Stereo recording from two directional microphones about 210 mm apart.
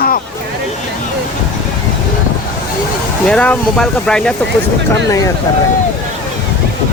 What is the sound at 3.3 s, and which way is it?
Speech, 5° left (ahead or behind).